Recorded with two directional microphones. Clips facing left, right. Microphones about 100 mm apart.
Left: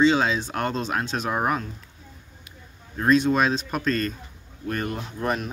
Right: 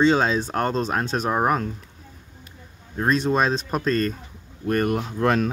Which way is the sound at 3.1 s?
35° right (ahead or behind).